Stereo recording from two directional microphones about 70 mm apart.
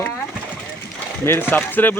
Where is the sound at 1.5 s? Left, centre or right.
Left.